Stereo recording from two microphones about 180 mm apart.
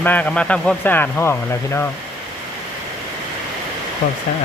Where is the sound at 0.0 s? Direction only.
10° left (ahead or behind).